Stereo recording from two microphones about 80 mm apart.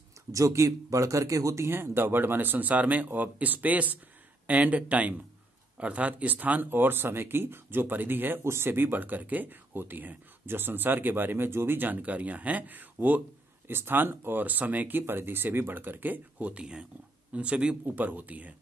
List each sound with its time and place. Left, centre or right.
0.3 s speech: right